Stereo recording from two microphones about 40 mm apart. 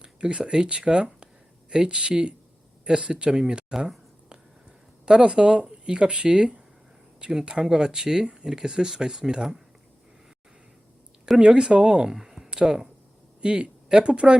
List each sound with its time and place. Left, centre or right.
0.0 s speech: right
5.0 s speech: right
11.3 s speech: right
12.1 s a sound: centre
12.5 s speech: centre